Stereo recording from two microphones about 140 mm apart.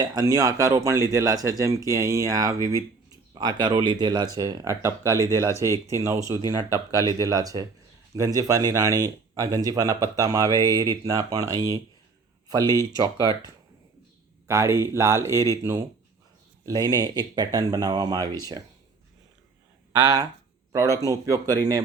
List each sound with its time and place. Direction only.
0.0 s speech: 25° right (ahead or behind)
5.5 s speech: 20° left (ahead or behind)
6.0 s speech: 20° right (ahead or behind)
6.2 s speech: 25° left (ahead or behind)
7.1 s speech: 25° right (ahead or behind)
20.7 s speech: 25° right (ahead or behind)